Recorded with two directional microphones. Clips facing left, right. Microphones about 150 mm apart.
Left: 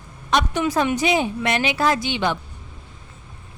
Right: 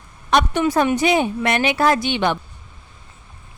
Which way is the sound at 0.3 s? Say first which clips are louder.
Right 3 dB; 60° right (ahead or behind).